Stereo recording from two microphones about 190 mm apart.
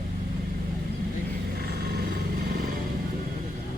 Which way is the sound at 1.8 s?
55° right (ahead or behind).